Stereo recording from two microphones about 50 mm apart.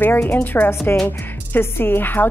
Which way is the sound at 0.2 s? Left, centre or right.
Left.